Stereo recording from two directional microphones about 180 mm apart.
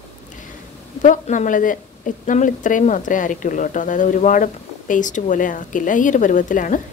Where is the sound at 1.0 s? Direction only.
45° left (ahead or behind).